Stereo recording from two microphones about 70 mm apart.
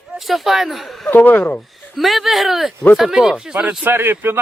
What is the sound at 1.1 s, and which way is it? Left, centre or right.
Speech, left.